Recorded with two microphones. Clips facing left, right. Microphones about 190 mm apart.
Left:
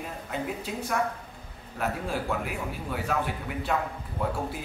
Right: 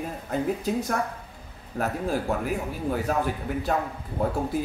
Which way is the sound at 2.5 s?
40° right (ahead or behind).